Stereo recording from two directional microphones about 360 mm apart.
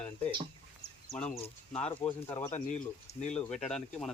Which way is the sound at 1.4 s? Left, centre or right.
Centre.